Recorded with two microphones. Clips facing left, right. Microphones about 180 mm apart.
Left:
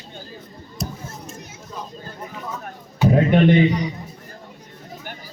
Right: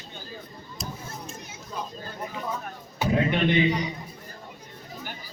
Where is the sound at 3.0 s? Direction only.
45° left (ahead or behind).